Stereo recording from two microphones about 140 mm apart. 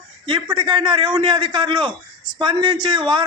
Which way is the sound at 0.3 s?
35° right (ahead or behind).